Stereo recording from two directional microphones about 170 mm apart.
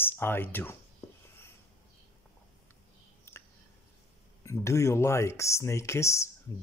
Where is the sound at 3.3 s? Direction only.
15° left (ahead or behind).